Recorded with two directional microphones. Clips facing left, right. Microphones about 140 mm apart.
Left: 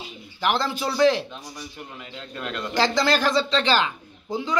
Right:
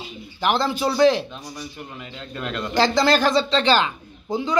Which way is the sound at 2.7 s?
25° right (ahead or behind).